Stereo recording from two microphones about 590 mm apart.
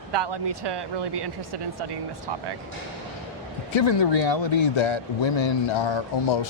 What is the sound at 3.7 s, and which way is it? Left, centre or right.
Speech, left.